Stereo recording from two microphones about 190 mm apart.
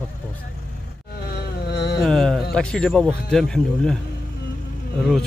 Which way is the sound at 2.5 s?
5° left (ahead or behind).